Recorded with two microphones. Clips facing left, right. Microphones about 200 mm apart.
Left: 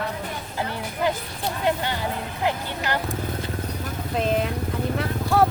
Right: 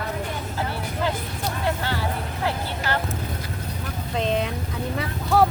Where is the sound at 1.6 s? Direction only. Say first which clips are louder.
Left 2 dB; 20° left (ahead or behind).